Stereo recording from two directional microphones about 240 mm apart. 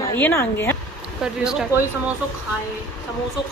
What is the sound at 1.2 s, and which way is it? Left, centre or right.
Speech, centre.